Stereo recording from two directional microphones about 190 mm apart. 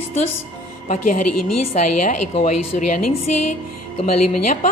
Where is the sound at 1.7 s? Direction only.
40° left (ahead or behind).